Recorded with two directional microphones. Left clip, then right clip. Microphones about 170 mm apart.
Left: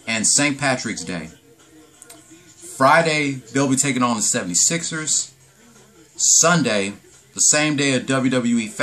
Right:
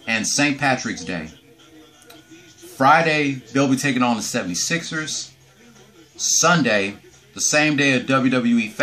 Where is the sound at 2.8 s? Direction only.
20° left (ahead or behind).